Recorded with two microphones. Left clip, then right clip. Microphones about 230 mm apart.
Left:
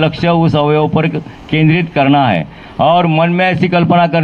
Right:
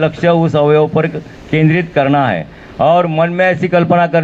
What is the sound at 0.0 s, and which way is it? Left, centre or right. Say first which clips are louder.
Speech: right 1 dB; left.